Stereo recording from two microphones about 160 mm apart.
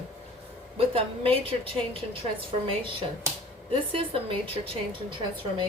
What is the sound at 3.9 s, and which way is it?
Speech, 35° right (ahead or behind).